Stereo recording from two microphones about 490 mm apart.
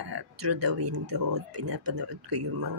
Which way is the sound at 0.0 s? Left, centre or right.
Right.